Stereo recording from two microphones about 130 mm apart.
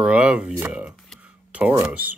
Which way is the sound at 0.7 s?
5° right (ahead or behind).